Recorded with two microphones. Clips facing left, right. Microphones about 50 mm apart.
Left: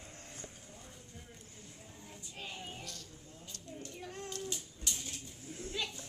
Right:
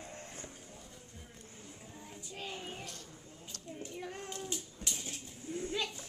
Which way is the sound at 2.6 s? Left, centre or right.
Right.